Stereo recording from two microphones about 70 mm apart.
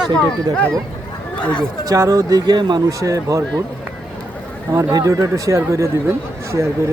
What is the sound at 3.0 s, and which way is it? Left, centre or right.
Speech, right.